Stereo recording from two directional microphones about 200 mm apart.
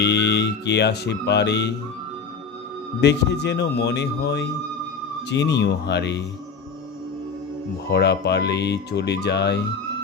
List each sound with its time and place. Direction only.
0.0 s speech: 60° left (ahead or behind)
3.0 s speech: 60° left (ahead or behind)
7.9 s speech: 55° left (ahead or behind)